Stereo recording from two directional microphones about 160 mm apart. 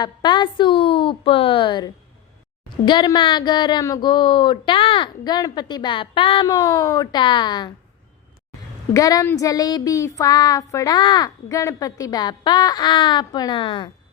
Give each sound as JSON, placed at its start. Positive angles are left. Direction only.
{"t": 0.0, "sound": "a woman's voice", "side_deg": 30}
{"t": 2.8, "sound": "child singing", "side_deg": 30}
{"t": 8.9, "sound": "child singing", "side_deg": 20}